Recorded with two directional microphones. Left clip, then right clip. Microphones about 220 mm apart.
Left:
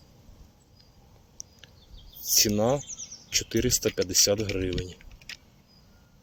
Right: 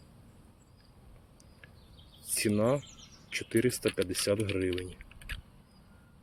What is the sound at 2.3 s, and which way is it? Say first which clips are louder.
Speech: left 5 dB; 15° left (ahead or behind).